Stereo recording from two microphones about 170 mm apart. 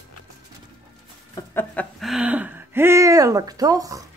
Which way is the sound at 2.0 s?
5° right (ahead or behind).